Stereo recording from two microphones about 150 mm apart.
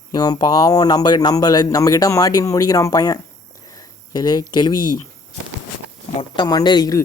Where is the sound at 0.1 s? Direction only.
30° left (ahead or behind).